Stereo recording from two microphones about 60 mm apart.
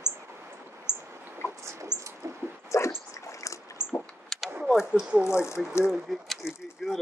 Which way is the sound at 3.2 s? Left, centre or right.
Left.